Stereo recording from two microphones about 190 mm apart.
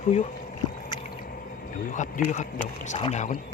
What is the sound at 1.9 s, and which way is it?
Speech, 45° left (ahead or behind).